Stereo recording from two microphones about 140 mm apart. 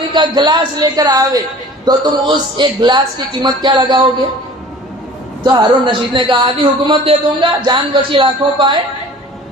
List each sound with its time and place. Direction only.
0.1 s a man's voice: 35° right (ahead or behind)
5.4 s a man's voice: 30° right (ahead or behind)